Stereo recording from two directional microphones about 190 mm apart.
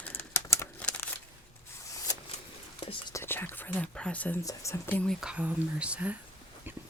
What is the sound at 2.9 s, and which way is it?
Speech, 25° left (ahead or behind).